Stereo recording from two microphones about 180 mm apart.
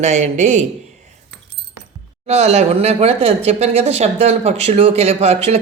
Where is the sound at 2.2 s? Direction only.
35° right (ahead or behind).